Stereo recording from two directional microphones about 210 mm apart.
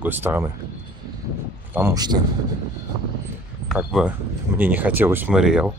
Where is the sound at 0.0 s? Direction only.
10° right (ahead or behind).